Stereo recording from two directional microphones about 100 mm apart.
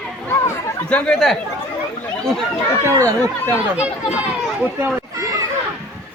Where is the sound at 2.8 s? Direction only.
30° right (ahead or behind).